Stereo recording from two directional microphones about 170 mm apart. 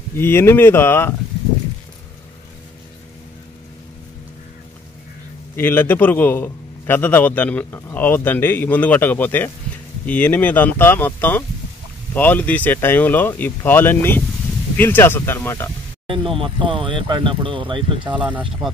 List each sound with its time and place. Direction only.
0.2 s a man's voice: 15° left (ahead or behind)
5.6 s a man's voice: 10° left (ahead or behind)
16.1 s speech: 30° right (ahead or behind)
18.1 s speech: 10° right (ahead or behind)